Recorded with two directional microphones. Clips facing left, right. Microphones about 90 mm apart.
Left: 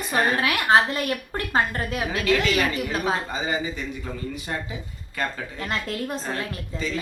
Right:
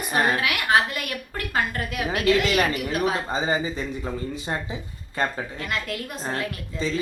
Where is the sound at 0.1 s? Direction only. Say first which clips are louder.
Even; 30° left (ahead or behind).